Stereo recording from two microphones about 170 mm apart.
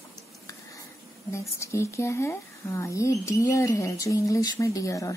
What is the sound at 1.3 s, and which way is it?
Speech, 15° left (ahead or behind).